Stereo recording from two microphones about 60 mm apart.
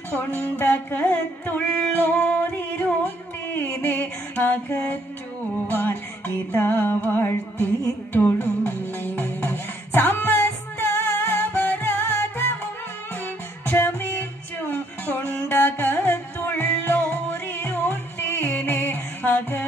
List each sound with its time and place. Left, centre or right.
0.1 s music: left
13.7 s music: left